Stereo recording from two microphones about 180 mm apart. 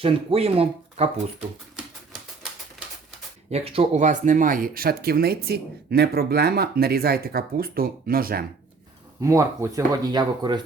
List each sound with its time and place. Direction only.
0.0 s speech: 30° right (ahead or behind)
3.5 s speech: 30° right (ahead or behind); by 8.4 s 55° right (ahead or behind)
9.2 s speech: 15° right (ahead or behind)